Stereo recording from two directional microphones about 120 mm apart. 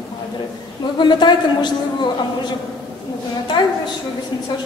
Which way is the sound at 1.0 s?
40° left (ahead or behind).